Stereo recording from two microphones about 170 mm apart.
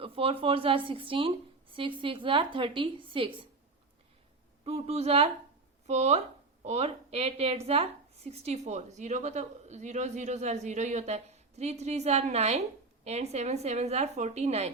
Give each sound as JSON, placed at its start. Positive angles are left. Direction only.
{"t": 0.0, "sound": "a woman's voice", "side_deg": -35}
{"t": 4.6, "sound": "a woman's voice", "side_deg": -35}